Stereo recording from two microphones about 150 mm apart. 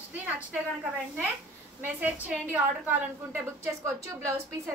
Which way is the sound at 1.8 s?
10° right (ahead or behind).